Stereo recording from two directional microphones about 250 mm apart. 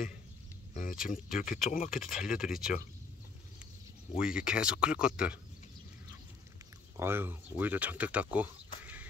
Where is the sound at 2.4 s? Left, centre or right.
Centre.